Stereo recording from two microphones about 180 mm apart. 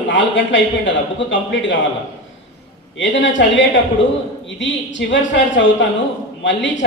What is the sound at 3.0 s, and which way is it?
A man's voice, 90° left.